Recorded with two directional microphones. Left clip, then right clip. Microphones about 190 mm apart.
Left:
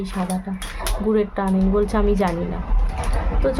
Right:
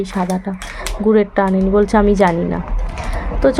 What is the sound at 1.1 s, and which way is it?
Speech, 25° right (ahead or behind).